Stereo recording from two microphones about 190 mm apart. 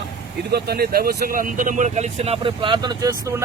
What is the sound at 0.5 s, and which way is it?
Speech, 55° right (ahead or behind).